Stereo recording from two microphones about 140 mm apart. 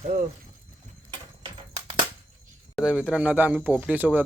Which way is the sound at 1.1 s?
35° right (ahead or behind).